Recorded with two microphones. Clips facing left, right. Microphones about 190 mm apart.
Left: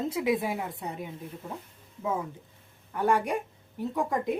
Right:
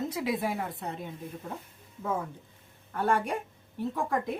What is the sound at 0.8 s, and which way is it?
Speech, 10° left (ahead or behind).